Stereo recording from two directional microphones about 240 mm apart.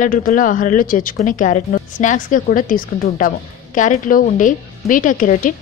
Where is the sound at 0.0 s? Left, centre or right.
Left.